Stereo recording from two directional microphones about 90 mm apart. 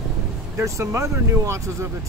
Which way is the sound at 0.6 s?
30° right (ahead or behind).